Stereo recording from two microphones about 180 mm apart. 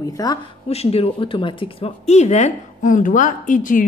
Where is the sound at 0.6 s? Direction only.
35° left (ahead or behind).